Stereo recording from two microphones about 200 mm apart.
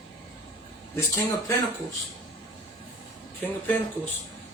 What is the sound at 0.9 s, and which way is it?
Speech, 15° left (ahead or behind).